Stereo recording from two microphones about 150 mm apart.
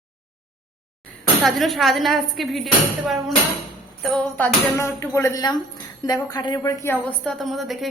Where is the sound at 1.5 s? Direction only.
Centre (ahead or behind).